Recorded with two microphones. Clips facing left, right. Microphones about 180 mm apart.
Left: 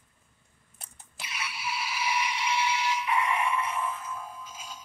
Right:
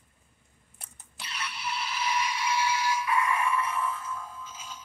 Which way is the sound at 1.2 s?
10° left (ahead or behind).